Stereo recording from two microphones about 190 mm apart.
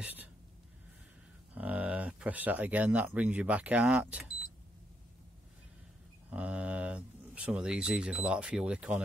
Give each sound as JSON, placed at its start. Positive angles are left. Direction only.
{"t": 1.5, "sound": "speech", "side_deg": -10}
{"t": 6.3, "sound": "speech", "side_deg": -5}